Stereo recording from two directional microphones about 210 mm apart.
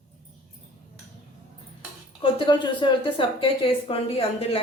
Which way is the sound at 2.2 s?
20° left (ahead or behind).